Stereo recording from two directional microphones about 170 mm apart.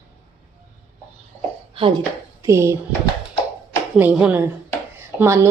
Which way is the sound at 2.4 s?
15° right (ahead or behind).